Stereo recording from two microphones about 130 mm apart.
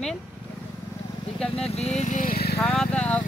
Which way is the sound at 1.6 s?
55° left (ahead or behind).